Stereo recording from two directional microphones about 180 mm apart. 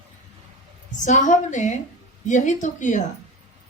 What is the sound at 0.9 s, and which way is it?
A man's voice, 45° left (ahead or behind).